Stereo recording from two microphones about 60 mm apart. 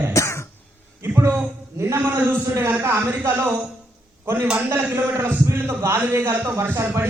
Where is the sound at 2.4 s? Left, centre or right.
Right.